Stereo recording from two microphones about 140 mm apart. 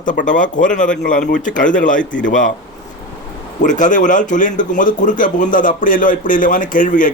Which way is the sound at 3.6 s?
65° left (ahead or behind).